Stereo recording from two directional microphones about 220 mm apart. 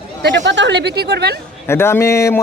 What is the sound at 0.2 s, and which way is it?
Speech, 55° right (ahead or behind).